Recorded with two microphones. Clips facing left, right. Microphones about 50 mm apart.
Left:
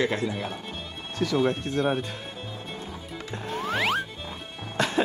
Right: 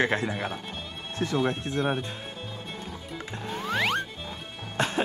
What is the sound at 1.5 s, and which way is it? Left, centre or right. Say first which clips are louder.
Speech: left 2 dB; right.